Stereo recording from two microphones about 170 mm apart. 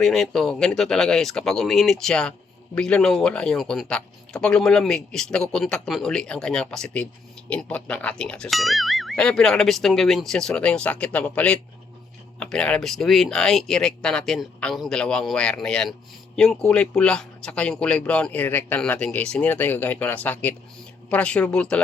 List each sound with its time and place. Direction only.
0.0 s speech: centre (ahead or behind)